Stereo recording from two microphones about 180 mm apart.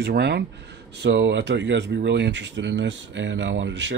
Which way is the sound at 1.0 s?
85° right.